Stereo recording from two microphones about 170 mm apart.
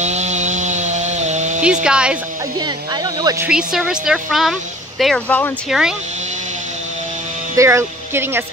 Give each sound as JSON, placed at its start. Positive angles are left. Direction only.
{"t": 0.0, "sound": "chainsaw", "side_deg": -40}
{"t": 1.6, "sound": "speech", "side_deg": -5}
{"t": 3.2, "sound": "speech", "side_deg": -20}
{"t": 3.4, "sound": "speech", "side_deg": -5}
{"t": 7.5, "sound": "speech", "side_deg": -15}